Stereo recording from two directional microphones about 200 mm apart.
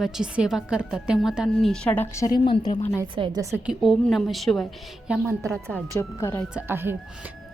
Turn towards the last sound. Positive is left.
turn(degrees=-10)  # may be behind; listen again after turning